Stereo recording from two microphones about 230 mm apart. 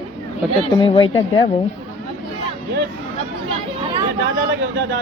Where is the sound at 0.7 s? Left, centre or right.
Left.